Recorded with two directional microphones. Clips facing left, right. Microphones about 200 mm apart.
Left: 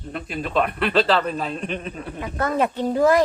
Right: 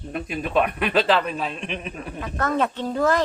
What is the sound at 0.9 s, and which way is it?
Speech, 15° right (ahead or behind).